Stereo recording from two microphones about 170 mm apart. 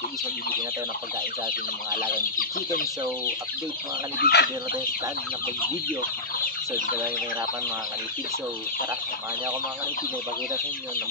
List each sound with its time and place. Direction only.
4.2 s speech: 75° left (ahead or behind)